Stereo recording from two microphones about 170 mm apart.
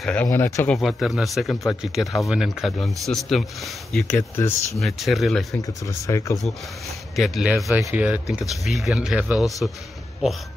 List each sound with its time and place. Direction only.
0.0 s speech: 10° left (ahead or behind)
0.7 s speech: centre (ahead or behind)
4.2 s speech: 20° left (ahead or behind)
4.7 s speech: centre (ahead or behind)
5.9 s speech: 20° left (ahead or behind)
7.2 s speech: centre (ahead or behind)